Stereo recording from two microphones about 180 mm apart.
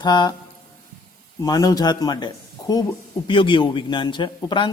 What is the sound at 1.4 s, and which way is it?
A man's voice, 20° left (ahead or behind).